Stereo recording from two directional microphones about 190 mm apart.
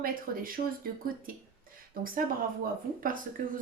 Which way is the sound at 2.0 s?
50° right (ahead or behind).